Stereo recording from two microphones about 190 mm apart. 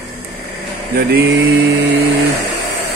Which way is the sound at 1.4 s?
70° right (ahead or behind).